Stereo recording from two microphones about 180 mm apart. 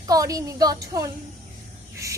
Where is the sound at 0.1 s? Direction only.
20° right (ahead or behind).